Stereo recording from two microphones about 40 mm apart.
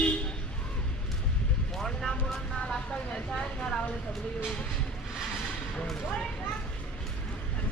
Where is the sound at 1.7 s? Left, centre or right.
Centre.